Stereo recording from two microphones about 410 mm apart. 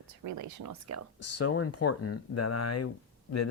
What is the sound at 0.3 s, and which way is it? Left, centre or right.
Speech, right.